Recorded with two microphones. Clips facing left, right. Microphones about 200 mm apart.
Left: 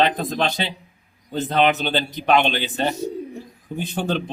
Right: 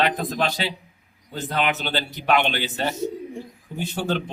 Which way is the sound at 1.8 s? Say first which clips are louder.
Left 3 dB; 20° left (ahead or behind).